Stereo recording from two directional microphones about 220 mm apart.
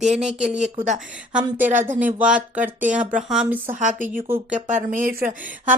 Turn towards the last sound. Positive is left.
turn(degrees=-35)  # may be behind; listen again after turning